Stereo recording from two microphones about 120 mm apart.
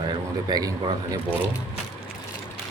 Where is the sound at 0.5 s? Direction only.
35° right (ahead or behind).